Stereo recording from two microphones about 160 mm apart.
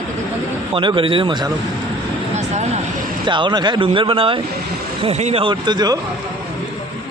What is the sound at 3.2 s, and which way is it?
Speech, 30° right (ahead or behind).